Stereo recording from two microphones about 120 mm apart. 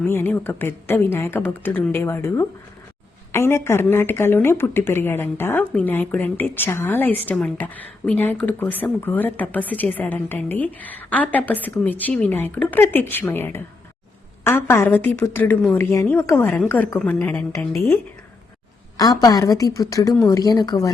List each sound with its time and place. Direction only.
0.0 s a woman's voice: 15° left (ahead or behind)